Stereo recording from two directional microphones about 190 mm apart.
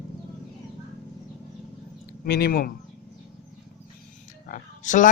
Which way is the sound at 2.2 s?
55° left (ahead or behind).